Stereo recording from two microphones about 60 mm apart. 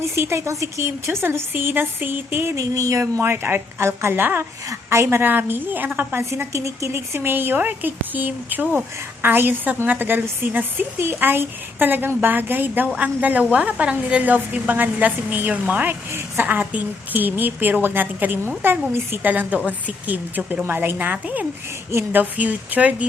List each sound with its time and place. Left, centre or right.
0.0 s speech: right
2.6 s a sound: right
3.0 s a woman's voice: right
4.7 s a sound: right
5.0 s a woman's voice: right
6.3 s a woman's voice: right